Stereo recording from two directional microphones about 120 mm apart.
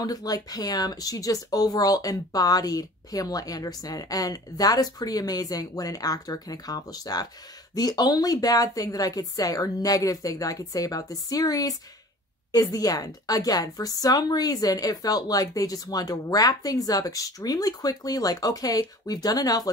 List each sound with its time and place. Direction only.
0.0 s speech: 30° left (ahead or behind)